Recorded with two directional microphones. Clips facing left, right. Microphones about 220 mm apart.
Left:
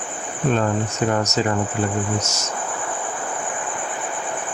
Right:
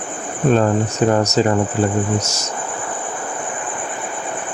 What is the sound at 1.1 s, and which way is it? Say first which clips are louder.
Speech: right 5 dB; 35° right (ahead or behind).